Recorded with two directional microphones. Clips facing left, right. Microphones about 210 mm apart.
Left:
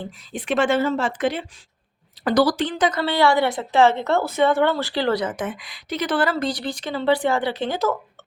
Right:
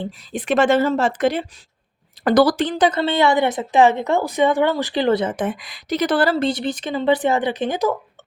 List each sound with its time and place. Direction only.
0.4 s speech: 40° right (ahead or behind)
2.2 s a woman's voice: 50° right (ahead or behind); by 7.9 s 15° right (ahead or behind)